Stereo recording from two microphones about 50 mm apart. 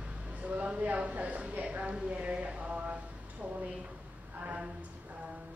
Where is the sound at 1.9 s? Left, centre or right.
Right.